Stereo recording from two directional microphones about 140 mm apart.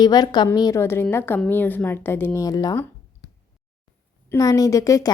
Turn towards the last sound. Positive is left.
turn(degrees=25)  # may be behind; listen again after turning